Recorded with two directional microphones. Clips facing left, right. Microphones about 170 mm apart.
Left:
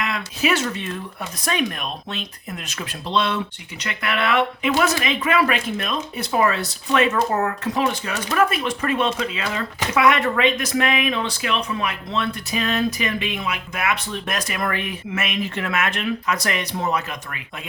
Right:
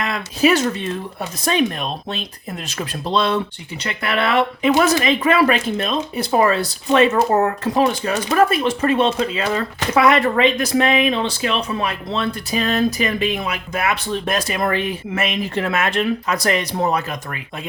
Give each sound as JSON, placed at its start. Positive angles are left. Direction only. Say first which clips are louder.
{"t": 0.0, "sound": "speech", "louder": "right 6 dB", "side_deg": -40}